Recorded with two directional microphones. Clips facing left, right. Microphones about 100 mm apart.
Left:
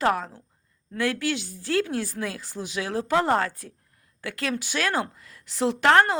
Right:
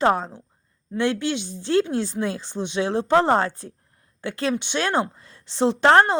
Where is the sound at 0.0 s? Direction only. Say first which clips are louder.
Right 4 dB; 30° right (ahead or behind).